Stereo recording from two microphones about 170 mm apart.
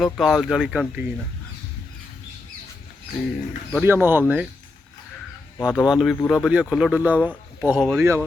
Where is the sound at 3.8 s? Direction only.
10° right (ahead or behind).